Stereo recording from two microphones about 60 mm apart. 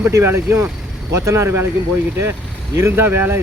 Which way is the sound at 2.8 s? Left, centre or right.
Right.